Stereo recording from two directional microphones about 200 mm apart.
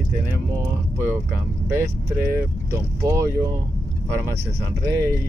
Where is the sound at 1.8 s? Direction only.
15° right (ahead or behind).